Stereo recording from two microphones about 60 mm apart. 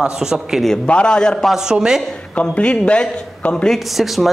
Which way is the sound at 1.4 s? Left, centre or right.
Centre.